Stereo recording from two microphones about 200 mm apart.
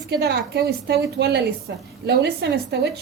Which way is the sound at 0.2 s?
55° right (ahead or behind).